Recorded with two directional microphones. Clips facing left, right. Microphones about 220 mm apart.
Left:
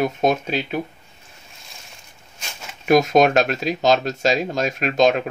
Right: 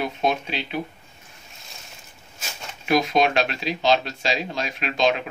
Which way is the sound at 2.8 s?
45° left (ahead or behind).